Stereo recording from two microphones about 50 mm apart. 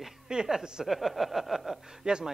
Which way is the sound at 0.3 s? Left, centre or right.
Centre.